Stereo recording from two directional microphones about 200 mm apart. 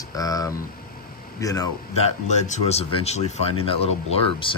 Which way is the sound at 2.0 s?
35° left (ahead or behind).